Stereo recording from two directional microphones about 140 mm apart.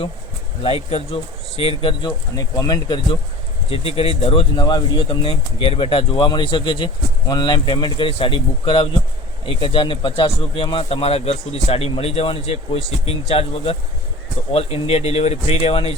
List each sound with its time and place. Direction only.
0.6 s speech: 45° left (ahead or behind)
3.7 s speech: 45° left (ahead or behind)